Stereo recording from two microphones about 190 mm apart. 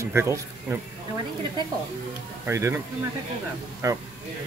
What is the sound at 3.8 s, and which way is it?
Speech, 20° right (ahead or behind).